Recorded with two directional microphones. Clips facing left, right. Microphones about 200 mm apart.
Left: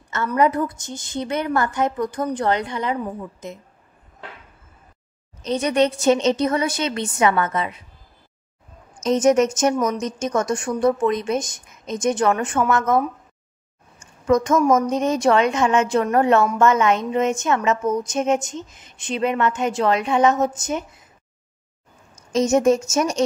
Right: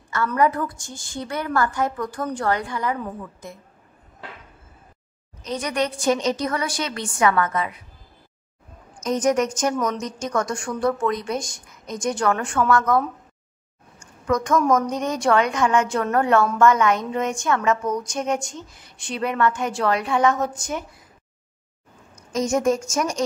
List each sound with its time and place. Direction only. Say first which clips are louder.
0.4 s a woman's voice: left 3 dB; 20° left (ahead or behind)
5.4 s a woman's voice: left 6 dB; 25° left (ahead or behind)
9.0 s a woman's voice: left 4 dB; 25° left (ahead or behind)
14.2 s a woman's voice: left 3 dB; 25° left (ahead or behind)
22.1 s a woman's voice: left 4 dB; 25° left (ahead or behind)